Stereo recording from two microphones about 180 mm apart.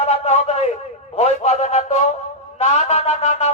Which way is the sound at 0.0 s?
40° left (ahead or behind).